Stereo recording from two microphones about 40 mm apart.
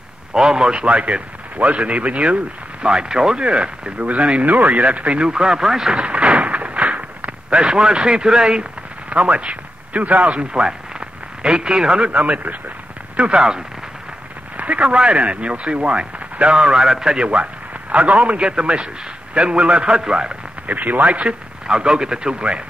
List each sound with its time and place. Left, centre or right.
0.3 s a man's voice: centre; by 5.2 s right
5.2 s speech: centre
5.9 s a sound: right
9.1 s a man's voice: right
13.1 s speech: right
14.6 s a man's voice: right
20.6 s speech: right